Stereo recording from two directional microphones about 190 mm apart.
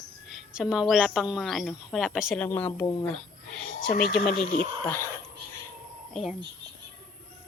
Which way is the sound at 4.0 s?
55° left (ahead or behind).